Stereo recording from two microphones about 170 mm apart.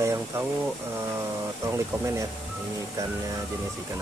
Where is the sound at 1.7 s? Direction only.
20° right (ahead or behind).